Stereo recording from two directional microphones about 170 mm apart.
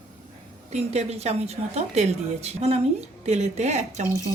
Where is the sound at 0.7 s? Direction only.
40° right (ahead or behind).